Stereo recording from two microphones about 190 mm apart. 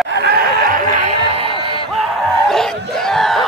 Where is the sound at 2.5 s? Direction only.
Centre (ahead or behind).